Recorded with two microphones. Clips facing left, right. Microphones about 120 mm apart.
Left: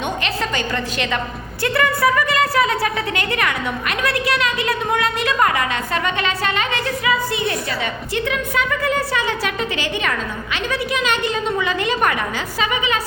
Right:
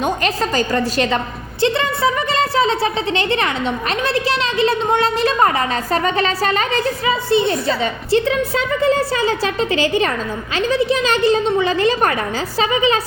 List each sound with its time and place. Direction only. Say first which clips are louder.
0.0 s speech: right 4 dB; 40° right (ahead or behind)
1.6 s speech: right 1 dB; 25° right (ahead or behind)